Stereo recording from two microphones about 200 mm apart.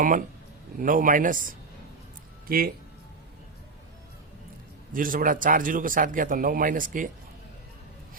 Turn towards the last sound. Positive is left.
turn(degrees=-40)  # may be behind; listen again after turning